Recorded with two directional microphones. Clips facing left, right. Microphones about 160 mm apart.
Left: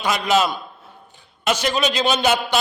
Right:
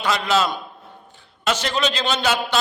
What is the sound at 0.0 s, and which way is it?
A man's voice, 15° left (ahead or behind).